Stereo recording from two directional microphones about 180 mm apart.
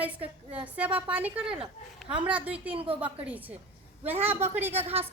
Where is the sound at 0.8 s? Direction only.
5° right (ahead or behind).